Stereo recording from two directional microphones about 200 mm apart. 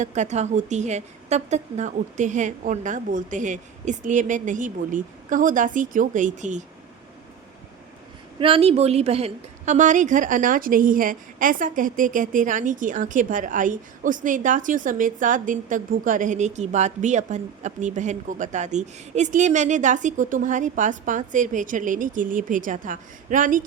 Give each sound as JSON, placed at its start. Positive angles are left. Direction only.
{"t": 0.0, "sound": "a woman's voice", "side_deg": -35}
{"t": 8.4, "sound": "a woman's voice", "side_deg": -30}